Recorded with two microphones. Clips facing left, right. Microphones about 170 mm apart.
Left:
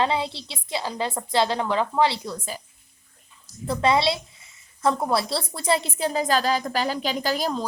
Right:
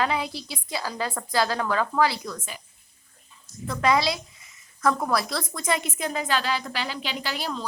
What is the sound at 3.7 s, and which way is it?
A woman's voice, 30° left (ahead or behind).